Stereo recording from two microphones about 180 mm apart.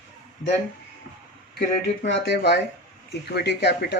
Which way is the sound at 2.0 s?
70° left (ahead or behind).